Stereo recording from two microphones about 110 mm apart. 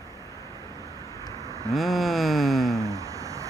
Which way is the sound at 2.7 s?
30° right (ahead or behind).